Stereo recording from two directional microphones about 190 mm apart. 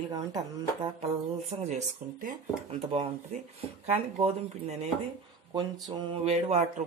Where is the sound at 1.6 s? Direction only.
40° right (ahead or behind).